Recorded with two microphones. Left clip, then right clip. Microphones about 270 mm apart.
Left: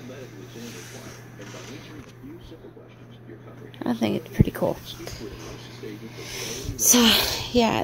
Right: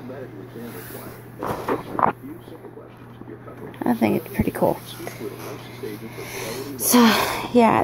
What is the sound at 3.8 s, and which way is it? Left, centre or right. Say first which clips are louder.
Speech: right 5 dB; left.